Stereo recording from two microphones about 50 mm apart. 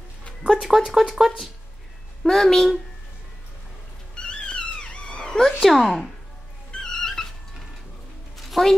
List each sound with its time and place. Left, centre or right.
0.6 s speech: centre
2.2 s speech: centre
4.1 s wail: centre
5.6 s speech: centre
6.7 s music: centre
8.5 s a woman's voice: centre